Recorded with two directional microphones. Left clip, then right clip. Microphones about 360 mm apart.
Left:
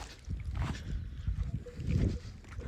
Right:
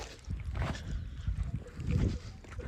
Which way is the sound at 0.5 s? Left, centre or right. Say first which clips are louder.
Right 3 dB; centre.